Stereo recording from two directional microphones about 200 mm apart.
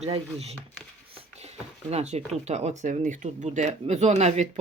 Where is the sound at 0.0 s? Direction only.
30° right (ahead or behind).